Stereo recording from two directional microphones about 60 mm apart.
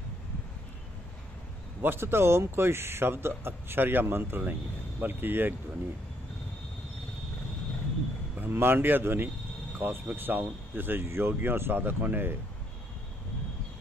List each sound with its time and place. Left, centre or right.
1.8 s a man's voice: right
8.4 s a man's voice: right